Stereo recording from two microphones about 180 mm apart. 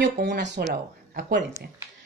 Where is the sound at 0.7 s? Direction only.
50° right (ahead or behind).